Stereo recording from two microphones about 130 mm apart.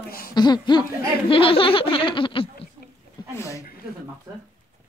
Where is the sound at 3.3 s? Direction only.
25° left (ahead or behind).